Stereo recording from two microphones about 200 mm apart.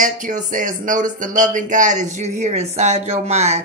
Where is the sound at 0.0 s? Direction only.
40° right (ahead or behind).